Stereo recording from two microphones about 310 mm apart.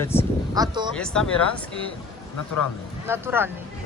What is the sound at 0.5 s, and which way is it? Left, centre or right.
Speech, centre.